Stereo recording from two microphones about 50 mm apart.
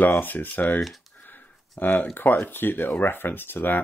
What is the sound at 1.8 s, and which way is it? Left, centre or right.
Speech, left.